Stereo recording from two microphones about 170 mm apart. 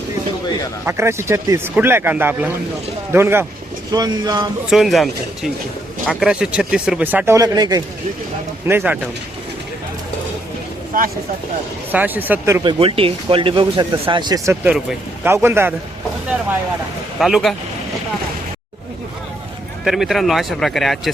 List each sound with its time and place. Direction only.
0.9 s speech: 15° right (ahead or behind)
4.7 s speech: centre (ahead or behind); by 7.8 s 25° right (ahead or behind)
8.6 s speech: 10° right (ahead or behind)
10.9 s speech: 55° right (ahead or behind)
11.9 s speech: 10° right (ahead or behind)
12.6 s speech: 35° right (ahead or behind)
14.6 s speech: 5° right (ahead or behind)
17.2 s speech: centre (ahead or behind)
19.8 s speech: centre (ahead or behind)